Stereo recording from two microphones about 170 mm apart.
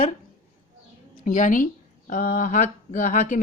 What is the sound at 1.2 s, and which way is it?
A woman's voice, 50° left (ahead or behind).